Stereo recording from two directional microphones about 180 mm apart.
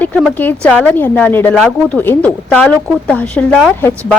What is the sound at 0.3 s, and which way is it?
A woman's voice, 10° left (ahead or behind).